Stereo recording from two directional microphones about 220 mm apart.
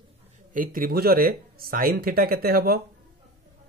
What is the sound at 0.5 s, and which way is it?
Speech, 40° right (ahead or behind).